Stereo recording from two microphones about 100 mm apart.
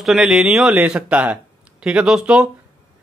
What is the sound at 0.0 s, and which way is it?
Speech, 5° right (ahead or behind).